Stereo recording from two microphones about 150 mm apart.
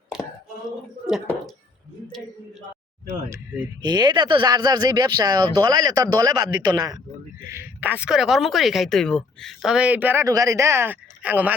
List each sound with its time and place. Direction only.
0.1 s a sound: 5° right (ahead or behind)
1.0 s speech: 5° right (ahead or behind)
3.1 s speech: 20° right (ahead or behind)
10.2 s speech: 20° right (ahead or behind)